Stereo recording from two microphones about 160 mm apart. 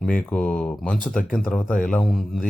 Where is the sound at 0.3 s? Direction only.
5° left (ahead or behind).